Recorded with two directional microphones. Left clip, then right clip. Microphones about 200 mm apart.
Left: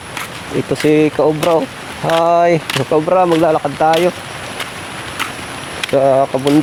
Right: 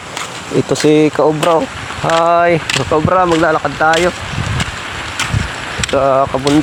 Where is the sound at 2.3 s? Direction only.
5° right (ahead or behind).